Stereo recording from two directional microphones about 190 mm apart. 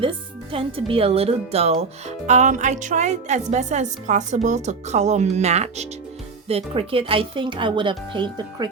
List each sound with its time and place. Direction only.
0.0 s speech: 30° right (ahead or behind)